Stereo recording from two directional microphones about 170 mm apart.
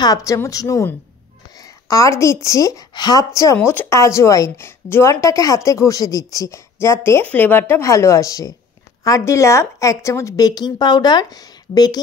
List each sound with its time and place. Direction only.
0.0 s a woman's voice: 20° left (ahead or behind)
3.5 s a woman's voice: 15° left (ahead or behind)